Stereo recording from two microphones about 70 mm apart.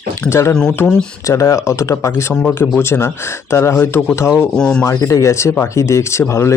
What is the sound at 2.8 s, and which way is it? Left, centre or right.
Speech, left.